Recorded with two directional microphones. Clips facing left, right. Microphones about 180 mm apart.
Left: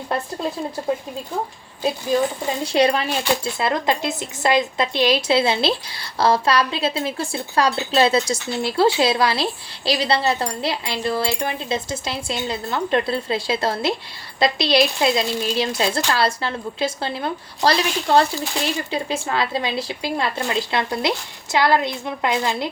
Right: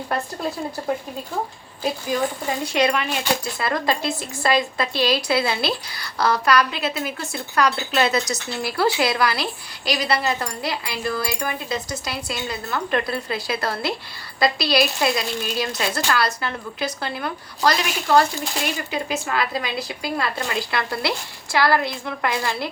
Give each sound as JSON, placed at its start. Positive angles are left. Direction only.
{"t": 2.7, "sound": "speech", "side_deg": 35}